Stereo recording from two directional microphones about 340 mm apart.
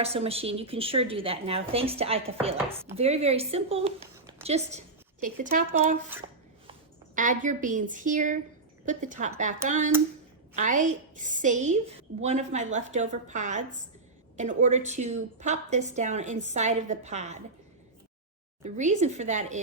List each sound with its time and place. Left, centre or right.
0.0 s a woman's voice: centre
6.1 s a sound: centre
7.2 s a woman's voice: right
18.6 s a woman's voice: right